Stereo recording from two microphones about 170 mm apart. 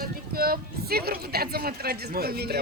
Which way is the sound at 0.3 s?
60° right (ahead or behind).